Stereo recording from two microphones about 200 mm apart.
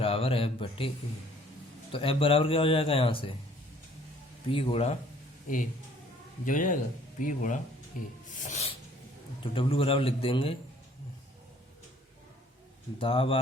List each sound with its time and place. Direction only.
0.0 s speech: 30° left (ahead or behind)
1.9 s a man's voice: 25° left (ahead or behind)
4.4 s a man's voice: 25° left (ahead or behind)
6.4 s a man's voice: 40° left (ahead or behind); by 10.6 s 25° left (ahead or behind)
13.0 s a man's voice: 25° left (ahead or behind)